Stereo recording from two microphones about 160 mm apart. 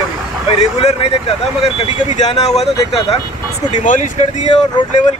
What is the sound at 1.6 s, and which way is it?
Speech, 40° left (ahead or behind).